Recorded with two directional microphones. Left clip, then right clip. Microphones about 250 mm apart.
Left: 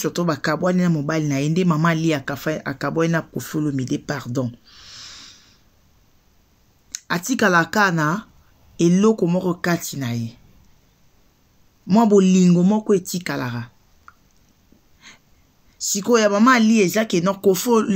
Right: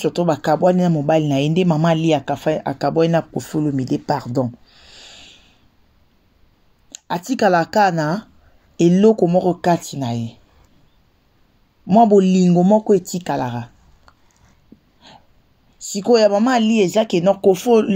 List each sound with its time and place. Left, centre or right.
0.0 s speech: centre
7.1 s speech: centre
11.9 s speech: centre
13.4 s speech: left
15.8 s speech: centre